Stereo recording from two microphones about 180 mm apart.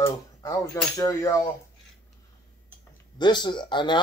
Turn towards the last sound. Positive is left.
turn(degrees=25)  # may be behind; listen again after turning